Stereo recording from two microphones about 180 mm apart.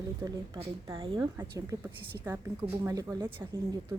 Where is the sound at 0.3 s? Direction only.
20° right (ahead or behind).